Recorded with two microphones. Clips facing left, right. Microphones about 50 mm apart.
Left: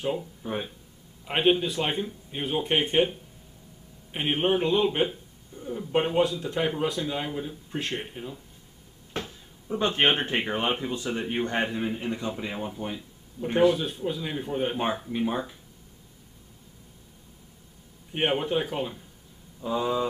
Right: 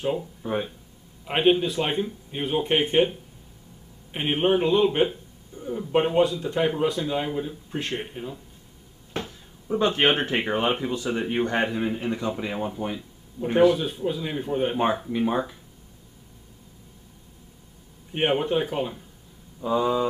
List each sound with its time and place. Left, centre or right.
0.0 s speech: centre
9.7 s speech: centre
18.1 s speech: centre
19.7 s speech: right